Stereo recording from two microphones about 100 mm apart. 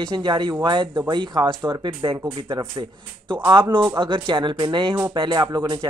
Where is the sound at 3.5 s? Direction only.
50° right (ahead or behind).